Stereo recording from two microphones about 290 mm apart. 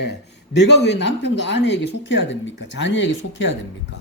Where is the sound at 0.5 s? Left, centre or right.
Left.